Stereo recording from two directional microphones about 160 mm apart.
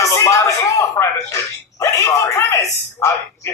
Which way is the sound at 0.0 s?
20° left (ahead or behind).